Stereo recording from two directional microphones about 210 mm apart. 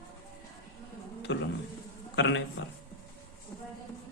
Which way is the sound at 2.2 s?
60° left (ahead or behind).